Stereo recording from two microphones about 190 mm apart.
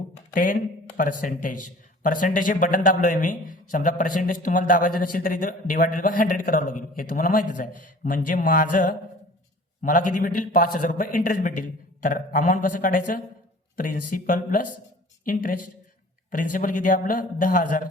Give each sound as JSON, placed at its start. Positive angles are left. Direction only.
{"t": 0.3, "sound": "a man's voice", "side_deg": 45}